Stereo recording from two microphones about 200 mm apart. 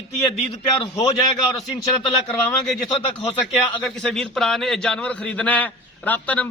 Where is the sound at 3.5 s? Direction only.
Centre (ahead or behind).